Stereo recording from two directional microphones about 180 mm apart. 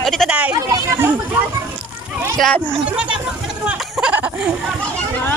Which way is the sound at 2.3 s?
Centre (ahead or behind).